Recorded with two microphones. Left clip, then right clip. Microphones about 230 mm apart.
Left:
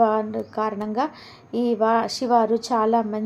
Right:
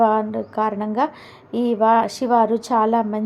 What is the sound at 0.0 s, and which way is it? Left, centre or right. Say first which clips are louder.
A woman's voice: right 3 dB; centre.